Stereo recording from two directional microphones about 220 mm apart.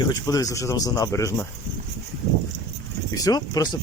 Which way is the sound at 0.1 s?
15° left (ahead or behind).